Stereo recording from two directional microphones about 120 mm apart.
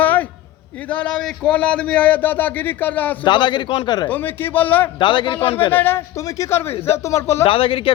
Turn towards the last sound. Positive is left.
turn(degrees=50)  # may be behind; listen again after turning